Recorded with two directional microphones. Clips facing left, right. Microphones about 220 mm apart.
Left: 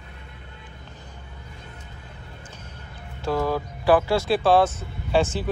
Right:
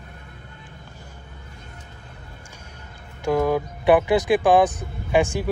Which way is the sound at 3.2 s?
15° right (ahead or behind).